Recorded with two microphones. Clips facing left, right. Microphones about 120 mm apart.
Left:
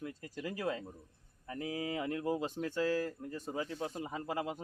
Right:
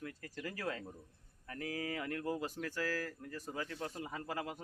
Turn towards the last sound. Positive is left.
turn(degrees=20)  # may be behind; listen again after turning